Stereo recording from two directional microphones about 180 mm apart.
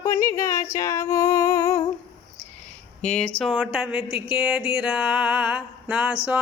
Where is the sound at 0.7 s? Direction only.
20° left (ahead or behind).